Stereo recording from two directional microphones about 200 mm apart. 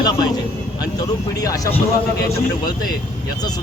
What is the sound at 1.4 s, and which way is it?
Speech, 15° left (ahead or behind).